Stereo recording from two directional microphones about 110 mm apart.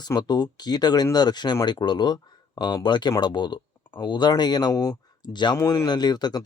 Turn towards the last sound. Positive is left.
turn(degrees=40)  # may be behind; listen again after turning